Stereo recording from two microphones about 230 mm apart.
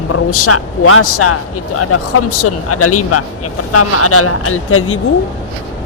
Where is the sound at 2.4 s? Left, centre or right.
Left.